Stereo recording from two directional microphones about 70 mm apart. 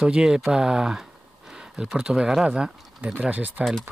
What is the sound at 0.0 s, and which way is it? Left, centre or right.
Speech, centre.